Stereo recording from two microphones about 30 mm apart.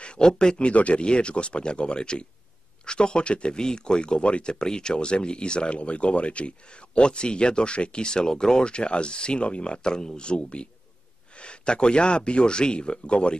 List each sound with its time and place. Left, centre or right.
0.2 s speech: left
0.6 s speech: left
1.0 s speech: left